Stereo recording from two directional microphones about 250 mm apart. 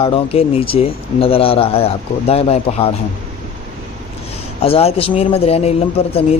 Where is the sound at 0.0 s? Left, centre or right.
Left.